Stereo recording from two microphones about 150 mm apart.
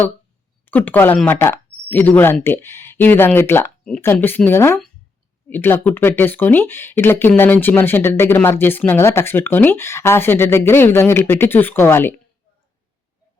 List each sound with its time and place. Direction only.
0.6 s speech: 10° left (ahead or behind)